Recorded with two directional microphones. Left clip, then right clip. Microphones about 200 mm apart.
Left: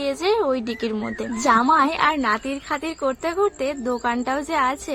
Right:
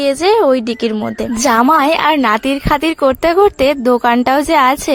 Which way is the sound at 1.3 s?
50° right (ahead or behind).